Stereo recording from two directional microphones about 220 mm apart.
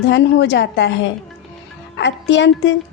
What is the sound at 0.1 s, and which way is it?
A woman's voice, 55° left (ahead or behind).